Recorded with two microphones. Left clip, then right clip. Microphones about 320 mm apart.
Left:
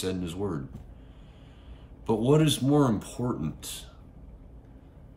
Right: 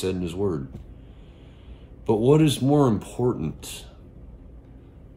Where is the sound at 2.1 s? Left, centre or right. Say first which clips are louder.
Right 5 dB; centre.